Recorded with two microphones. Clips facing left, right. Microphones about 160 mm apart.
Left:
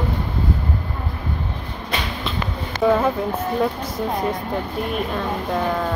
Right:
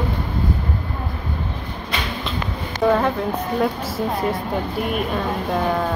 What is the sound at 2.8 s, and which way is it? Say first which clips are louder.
Speech: even; centre (ahead or behind).